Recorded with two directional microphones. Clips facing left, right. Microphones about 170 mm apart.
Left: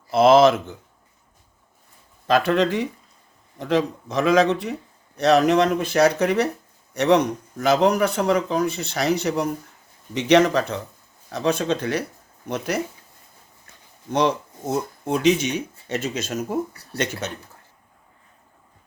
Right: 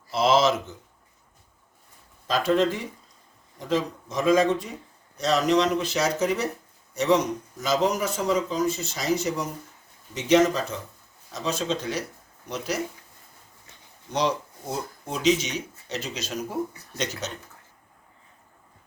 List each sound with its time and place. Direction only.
0.1 s speech: 55° left (ahead or behind)
2.2 s speech: 65° left (ahead or behind)
5.1 s speech: 60° left (ahead or behind)
14.1 s speech: 55° left (ahead or behind)
16.7 s speech: 65° left (ahead or behind)